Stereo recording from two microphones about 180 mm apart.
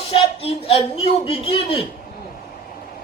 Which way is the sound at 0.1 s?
30° left (ahead or behind).